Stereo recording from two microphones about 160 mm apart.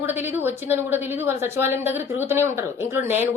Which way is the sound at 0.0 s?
15° right (ahead or behind).